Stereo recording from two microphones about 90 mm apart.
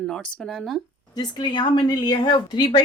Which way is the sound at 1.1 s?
50° left (ahead or behind).